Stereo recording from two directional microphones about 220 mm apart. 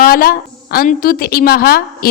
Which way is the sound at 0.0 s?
40° left (ahead or behind).